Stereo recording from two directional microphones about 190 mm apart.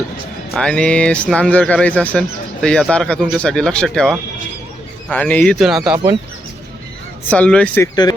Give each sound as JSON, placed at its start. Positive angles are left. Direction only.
{"t": 0.5, "sound": "speech", "side_deg": 5}
{"t": 7.3, "sound": "speech", "side_deg": 5}